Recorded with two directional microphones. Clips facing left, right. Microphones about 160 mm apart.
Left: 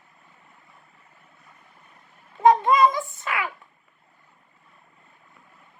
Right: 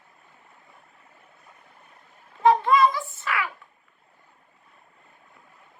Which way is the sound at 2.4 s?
20° left (ahead or behind).